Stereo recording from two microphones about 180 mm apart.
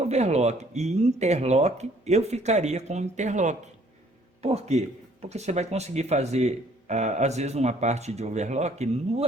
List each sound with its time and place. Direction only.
0.0 s speech: 35° right (ahead or behind)